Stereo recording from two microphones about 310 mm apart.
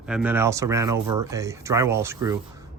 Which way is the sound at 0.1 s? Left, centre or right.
Centre.